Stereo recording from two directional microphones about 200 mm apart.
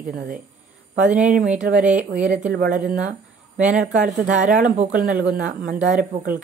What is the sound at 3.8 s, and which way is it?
Speech, 40° right (ahead or behind).